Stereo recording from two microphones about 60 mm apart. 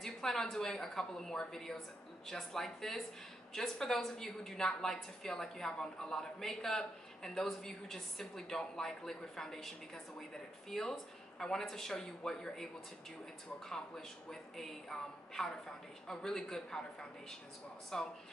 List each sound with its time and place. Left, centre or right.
0.0 s a woman's voice: centre
13.7 s a woman's voice: centre
17.9 s a woman's voice: centre